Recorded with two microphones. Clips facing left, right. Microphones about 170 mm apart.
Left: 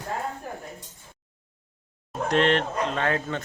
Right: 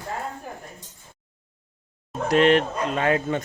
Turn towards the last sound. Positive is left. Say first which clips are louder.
# right 4 dB
turn(degrees=-10)  # may be behind; listen again after turning